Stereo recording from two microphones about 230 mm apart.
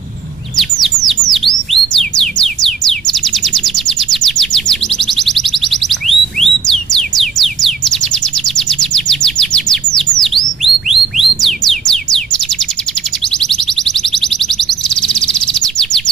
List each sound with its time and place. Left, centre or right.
0.6 s bird: centre
13.3 s alarm: centre